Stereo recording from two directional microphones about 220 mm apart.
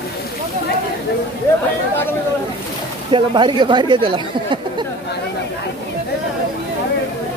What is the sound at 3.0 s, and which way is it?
Speech, 20° right (ahead or behind).